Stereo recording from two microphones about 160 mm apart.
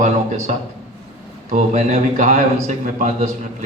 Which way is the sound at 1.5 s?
55° right (ahead or behind).